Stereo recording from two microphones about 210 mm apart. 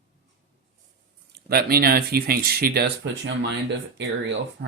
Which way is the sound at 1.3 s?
45° right (ahead or behind).